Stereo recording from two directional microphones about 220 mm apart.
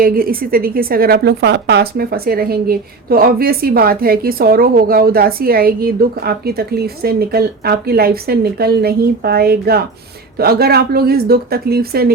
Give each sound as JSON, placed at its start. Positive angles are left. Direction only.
{"t": 0.0, "sound": "a woman's voice", "side_deg": -40}